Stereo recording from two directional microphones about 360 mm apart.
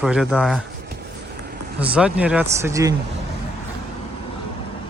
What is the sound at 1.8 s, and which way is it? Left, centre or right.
Speech, centre.